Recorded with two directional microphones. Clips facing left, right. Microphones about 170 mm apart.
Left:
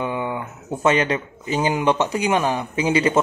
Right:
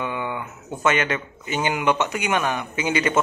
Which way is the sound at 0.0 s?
30° left (ahead or behind).